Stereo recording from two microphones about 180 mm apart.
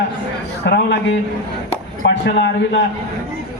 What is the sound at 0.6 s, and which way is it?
A man's voice, 65° left (ahead or behind).